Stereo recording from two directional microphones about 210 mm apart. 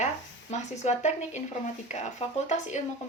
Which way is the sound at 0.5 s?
35° left (ahead or behind).